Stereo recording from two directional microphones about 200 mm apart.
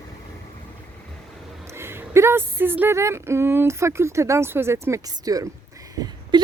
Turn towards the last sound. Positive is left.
turn(degrees=-20)  # may be behind; listen again after turning